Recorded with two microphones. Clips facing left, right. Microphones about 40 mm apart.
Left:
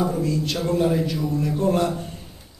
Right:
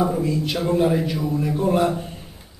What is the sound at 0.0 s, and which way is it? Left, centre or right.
A man's voice, centre.